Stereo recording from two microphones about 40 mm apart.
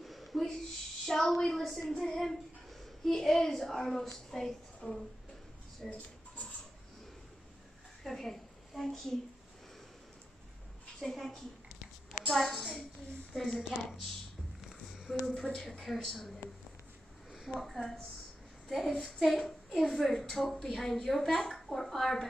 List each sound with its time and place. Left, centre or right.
0.0 s a sound: centre
1.0 s a woman's voice: centre
5.8 s a woman's voice: centre
8.0 s a sound: centre
8.8 s a woman's voice: centre
11.0 s a woman's voice: centre
15.1 s a woman's voice: centre
15.5 s a woman's voice: centre
17.3 s a woman's voice: centre